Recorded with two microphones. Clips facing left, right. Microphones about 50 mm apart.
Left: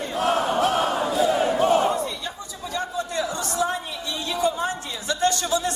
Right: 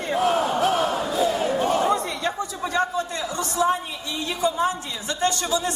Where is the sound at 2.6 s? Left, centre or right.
Right.